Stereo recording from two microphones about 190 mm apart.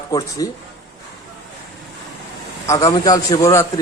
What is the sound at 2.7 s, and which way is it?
Speech, 20° left (ahead or behind).